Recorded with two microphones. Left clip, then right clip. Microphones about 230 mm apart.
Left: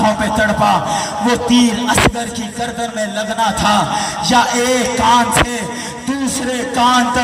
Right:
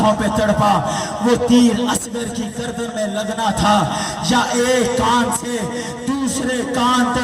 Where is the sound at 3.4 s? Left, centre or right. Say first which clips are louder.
Left 2 dB; right.